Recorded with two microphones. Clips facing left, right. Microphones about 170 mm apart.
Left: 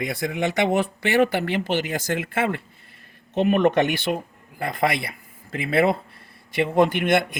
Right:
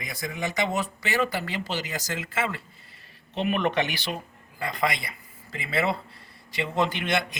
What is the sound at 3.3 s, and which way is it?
Speech, 45° left (ahead or behind).